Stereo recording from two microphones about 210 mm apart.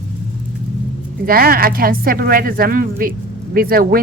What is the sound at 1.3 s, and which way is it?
A woman's voice, 45° right (ahead or behind).